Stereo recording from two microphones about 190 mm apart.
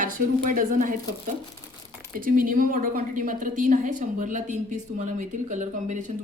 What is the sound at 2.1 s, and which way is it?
A woman's voice, 50° right (ahead or behind).